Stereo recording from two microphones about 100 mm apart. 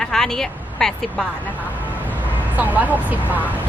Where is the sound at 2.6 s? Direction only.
15° right (ahead or behind).